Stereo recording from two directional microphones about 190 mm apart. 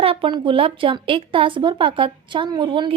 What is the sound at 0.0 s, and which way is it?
A woman's voice, 30° right (ahead or behind).